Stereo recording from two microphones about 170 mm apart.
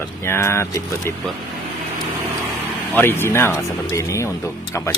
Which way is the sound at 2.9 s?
15° left (ahead or behind).